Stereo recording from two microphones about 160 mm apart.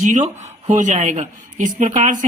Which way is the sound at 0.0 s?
50° right (ahead or behind).